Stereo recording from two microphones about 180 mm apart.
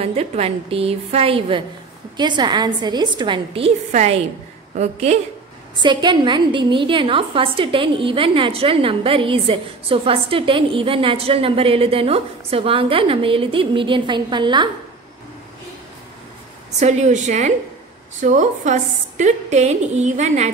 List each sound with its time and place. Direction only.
0.0 s a woman's voice: 35° right (ahead or behind)
5.8 s a woman's voice: 25° right (ahead or behind)
16.8 s a woman's voice: 40° right (ahead or behind)